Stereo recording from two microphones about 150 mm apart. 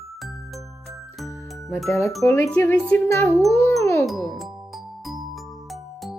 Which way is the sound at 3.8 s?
20° left (ahead or behind).